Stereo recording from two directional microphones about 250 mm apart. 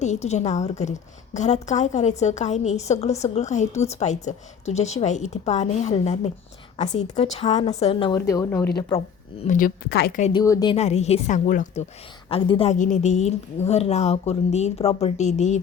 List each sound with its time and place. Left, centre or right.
0.0 s a woman's voice: left; by 8.7 s centre
9.4 s a woman's voice: left
10.3 s a woman's voice: centre